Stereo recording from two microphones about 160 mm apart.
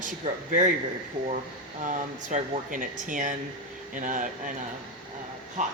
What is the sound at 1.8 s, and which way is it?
Speech, 55° right (ahead or behind).